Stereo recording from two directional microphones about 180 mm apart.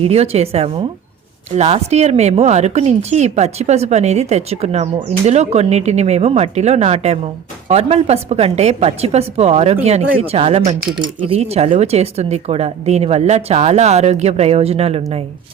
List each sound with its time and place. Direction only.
0.0 s speech: 35° right (ahead or behind)